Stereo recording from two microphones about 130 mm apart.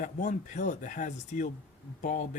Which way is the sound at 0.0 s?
75° left (ahead or behind).